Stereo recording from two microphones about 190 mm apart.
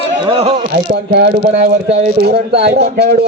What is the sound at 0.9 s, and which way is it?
Speech, 55° right (ahead or behind).